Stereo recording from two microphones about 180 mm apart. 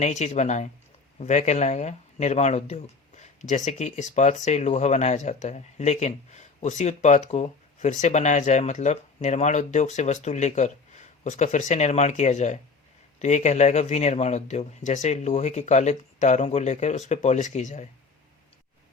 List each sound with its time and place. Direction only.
0.0 s speech: 40° left (ahead or behind)